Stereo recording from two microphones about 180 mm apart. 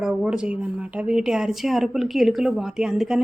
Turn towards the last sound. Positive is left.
turn(degrees=-5)  # may be behind; listen again after turning